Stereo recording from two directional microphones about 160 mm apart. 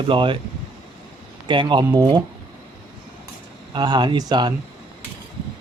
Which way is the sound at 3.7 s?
25° right (ahead or behind).